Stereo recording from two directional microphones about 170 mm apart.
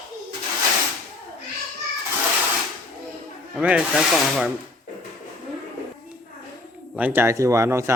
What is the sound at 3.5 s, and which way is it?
Rub, 5° right (ahead or behind).